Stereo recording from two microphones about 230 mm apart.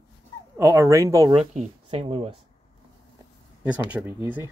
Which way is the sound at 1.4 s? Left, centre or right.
Right.